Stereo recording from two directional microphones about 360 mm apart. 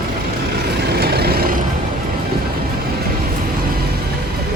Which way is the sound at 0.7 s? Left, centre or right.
Right.